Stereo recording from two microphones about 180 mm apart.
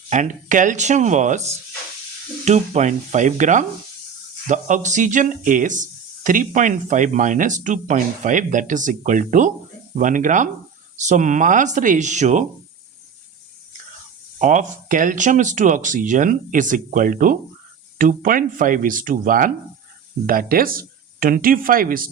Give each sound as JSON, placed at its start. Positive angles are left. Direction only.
{"t": 0.1, "sound": "speech", "side_deg": -45}
{"t": 2.4, "sound": "speech", "side_deg": -40}
{"t": 14.3, "sound": "speech", "side_deg": -45}